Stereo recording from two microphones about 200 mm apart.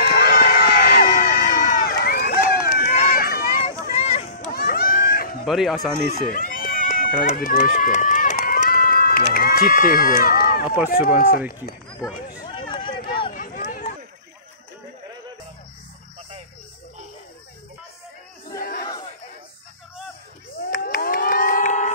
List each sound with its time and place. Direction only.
0.0 s crowd: 50° left (ahead or behind)
4.0 s run: 30° left (ahead or behind)
4.6 s a sound: 50° left (ahead or behind)
5.4 s speech: centre (ahead or behind)
6.2 s run: 45° left (ahead or behind)
9.3 s speech: 45° left (ahead or behind)
12.4 s run: 25° left (ahead or behind)
13.3 s run: 40° left (ahead or behind)
20.7 s crowd: 45° left (ahead or behind)